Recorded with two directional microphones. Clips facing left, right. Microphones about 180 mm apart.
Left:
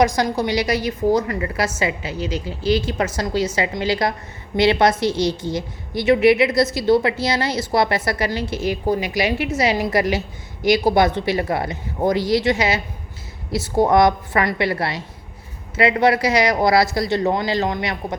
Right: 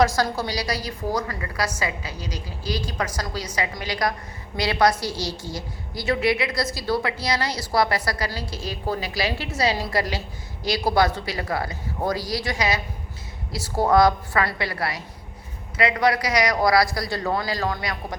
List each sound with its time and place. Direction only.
0.0 s a woman's voice: 20° left (ahead or behind)